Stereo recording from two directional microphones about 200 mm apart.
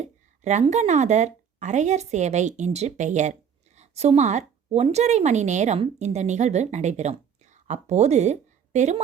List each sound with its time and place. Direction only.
0.0 s a woman's voice: 35° right (ahead or behind)